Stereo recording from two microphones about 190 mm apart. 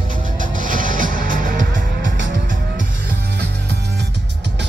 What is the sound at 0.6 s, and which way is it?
Music, 45° right (ahead or behind).